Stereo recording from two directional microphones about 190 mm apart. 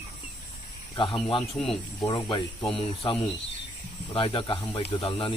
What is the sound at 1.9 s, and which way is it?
Speech, 25° left (ahead or behind).